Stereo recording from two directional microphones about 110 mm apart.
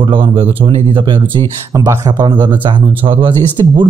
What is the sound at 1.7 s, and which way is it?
Speech, 30° right (ahead or behind).